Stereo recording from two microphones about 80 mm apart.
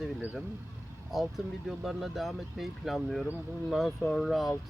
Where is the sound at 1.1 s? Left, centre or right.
Centre.